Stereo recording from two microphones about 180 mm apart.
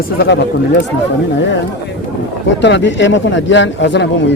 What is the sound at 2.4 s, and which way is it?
Speech, 85° left.